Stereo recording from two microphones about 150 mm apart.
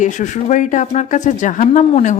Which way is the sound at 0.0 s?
55° left (ahead or behind).